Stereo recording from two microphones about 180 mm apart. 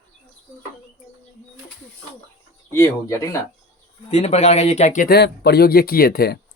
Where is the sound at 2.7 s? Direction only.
15° left (ahead or behind).